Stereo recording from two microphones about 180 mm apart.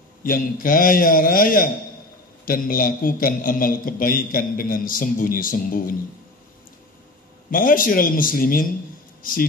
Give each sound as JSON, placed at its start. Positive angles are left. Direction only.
{"t": 0.2, "sound": "a man's voice", "side_deg": 50}
{"t": 7.5, "sound": "a man's voice", "side_deg": 50}